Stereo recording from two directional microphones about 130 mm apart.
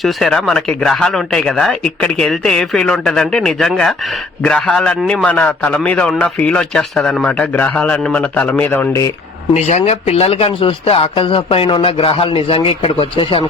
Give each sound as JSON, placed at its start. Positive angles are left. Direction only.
{"t": 0.0, "sound": "a man's voice", "side_deg": 5}
{"t": 9.6, "sound": "speech", "side_deg": 55}